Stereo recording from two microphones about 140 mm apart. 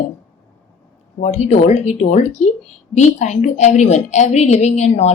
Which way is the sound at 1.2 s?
55° left (ahead or behind).